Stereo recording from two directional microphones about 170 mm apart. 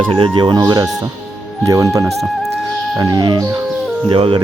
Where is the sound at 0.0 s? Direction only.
30° right (ahead or behind).